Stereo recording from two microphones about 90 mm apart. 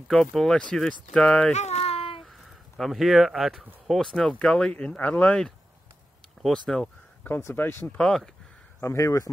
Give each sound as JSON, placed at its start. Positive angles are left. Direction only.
{"t": 0.1, "sound": "speech", "side_deg": 5}
{"t": 1.9, "sound": "a sound", "side_deg": 90}
{"t": 2.8, "sound": "speech", "side_deg": 0}
{"t": 7.2, "sound": "speech", "side_deg": 25}
{"t": 8.0, "sound": "speech", "side_deg": 5}
{"t": 8.8, "sound": "speech", "side_deg": 35}